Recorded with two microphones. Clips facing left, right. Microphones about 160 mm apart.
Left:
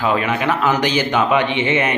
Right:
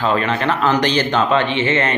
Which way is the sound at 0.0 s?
10° left (ahead or behind).